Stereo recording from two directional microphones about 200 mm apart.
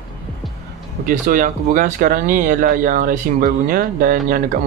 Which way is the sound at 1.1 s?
40° right (ahead or behind).